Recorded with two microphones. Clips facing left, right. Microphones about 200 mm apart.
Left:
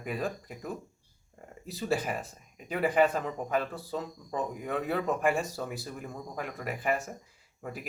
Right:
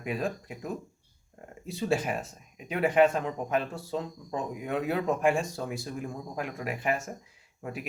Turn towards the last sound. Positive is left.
turn(degrees=0)  # may be behind; listen again after turning